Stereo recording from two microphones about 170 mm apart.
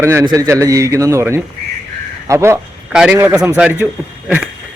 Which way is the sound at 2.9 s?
5° right (ahead or behind).